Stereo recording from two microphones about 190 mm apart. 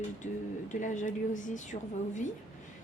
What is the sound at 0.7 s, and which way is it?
A woman's voice, 40° left (ahead or behind).